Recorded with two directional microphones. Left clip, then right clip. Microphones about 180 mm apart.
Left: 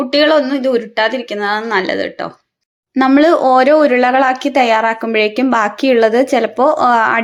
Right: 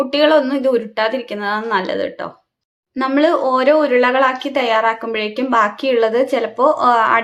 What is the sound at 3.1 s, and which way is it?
A woman's voice, 30° left (ahead or behind).